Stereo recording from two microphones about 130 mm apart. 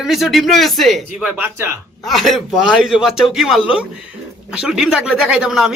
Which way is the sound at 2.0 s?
Centre (ahead or behind).